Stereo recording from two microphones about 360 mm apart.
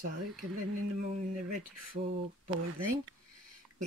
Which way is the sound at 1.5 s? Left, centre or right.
Right.